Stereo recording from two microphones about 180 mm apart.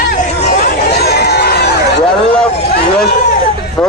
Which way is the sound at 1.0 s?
65° left (ahead or behind).